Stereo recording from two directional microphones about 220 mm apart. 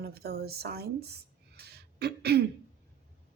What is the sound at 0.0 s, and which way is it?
Speech, 45° right (ahead or behind).